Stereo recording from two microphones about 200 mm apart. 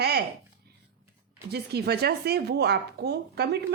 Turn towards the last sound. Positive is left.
turn(degrees=-55)  # may be behind; listen again after turning